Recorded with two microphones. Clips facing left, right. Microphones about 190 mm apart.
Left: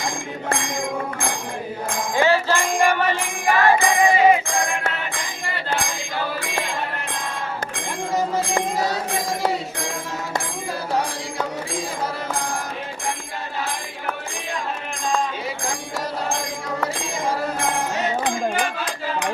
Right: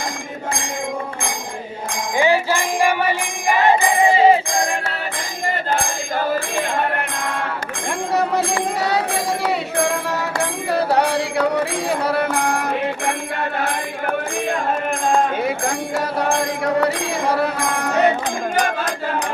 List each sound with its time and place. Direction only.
2.1 s music: 15° right (ahead or behind); by 4.6 s 30° right (ahead or behind)
5.5 s music: 50° right (ahead or behind)
18.5 s speech: 55° right (ahead or behind)